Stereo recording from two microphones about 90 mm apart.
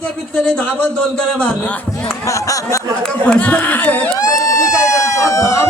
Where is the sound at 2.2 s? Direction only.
35° left (ahead or behind).